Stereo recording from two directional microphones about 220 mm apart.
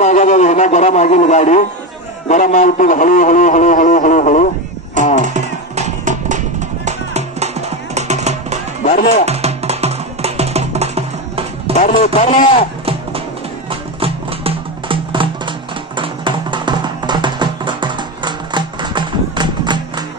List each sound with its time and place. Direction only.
0.0 s a man's voice: 35° left (ahead or behind)
5.2 s music: 35° right (ahead or behind)
8.8 s music: 40° left (ahead or behind)
9.2 s music: 30° right (ahead or behind)
11.7 s a man's voice: 35° left (ahead or behind)
13.7 s music: 25° right (ahead or behind)